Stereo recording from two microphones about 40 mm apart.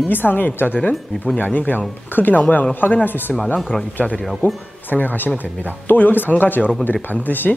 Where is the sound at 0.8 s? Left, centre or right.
Left.